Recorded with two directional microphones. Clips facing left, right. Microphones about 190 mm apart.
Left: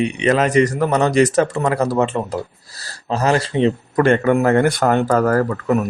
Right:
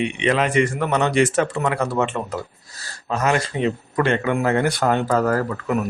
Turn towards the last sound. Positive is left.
turn(degrees=50)  # may be behind; listen again after turning